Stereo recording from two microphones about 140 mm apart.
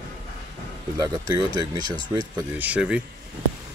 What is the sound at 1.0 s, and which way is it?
Speech, 30° right (ahead or behind).